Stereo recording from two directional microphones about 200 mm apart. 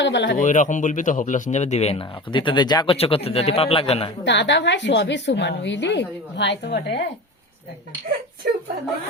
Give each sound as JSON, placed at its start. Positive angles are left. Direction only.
{"t": 0.0, "sound": "a woman's voice", "side_deg": 60}
{"t": 0.3, "sound": "speech", "side_deg": 40}
{"t": 4.2, "sound": "a woman's voice", "side_deg": 60}